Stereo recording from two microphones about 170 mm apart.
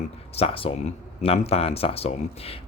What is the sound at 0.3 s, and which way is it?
Speech, 35° left (ahead or behind).